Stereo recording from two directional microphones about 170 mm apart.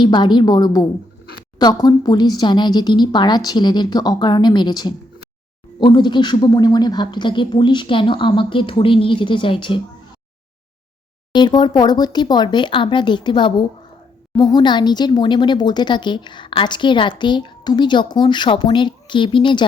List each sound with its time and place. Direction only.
0.0 s speech: 25° left (ahead or behind)
11.3 s speech: 25° left (ahead or behind)